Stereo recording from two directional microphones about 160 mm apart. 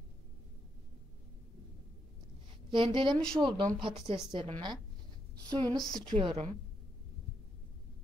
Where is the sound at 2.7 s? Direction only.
30° right (ahead or behind).